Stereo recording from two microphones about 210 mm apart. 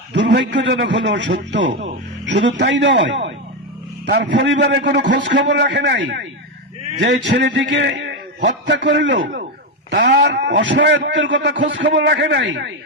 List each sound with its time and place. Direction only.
0.3 s a man's voice: 55° right (ahead or behind)
9.9 s a man's voice: 45° right (ahead or behind)